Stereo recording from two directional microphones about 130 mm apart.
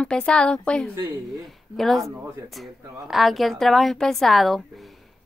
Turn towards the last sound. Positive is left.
turn(degrees=0)  # may be behind; listen again after turning